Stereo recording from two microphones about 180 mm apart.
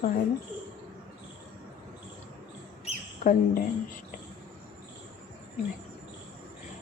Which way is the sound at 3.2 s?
50° left (ahead or behind).